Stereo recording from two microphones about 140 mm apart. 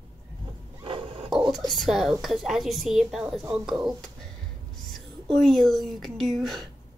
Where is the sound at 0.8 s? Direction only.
40° right (ahead or behind).